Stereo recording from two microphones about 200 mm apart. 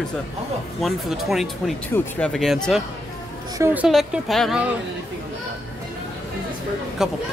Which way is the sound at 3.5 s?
10° right (ahead or behind).